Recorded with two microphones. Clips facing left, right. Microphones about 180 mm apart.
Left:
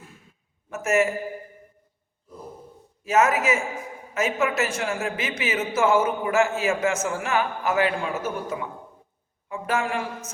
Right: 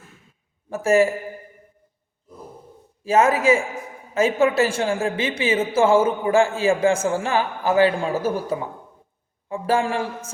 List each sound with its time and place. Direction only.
0.7 s a man's voice: 30° right (ahead or behind)
3.0 s a man's voice: 30° right (ahead or behind)